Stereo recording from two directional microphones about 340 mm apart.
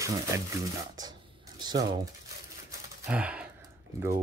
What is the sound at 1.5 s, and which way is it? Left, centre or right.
Speech, centre.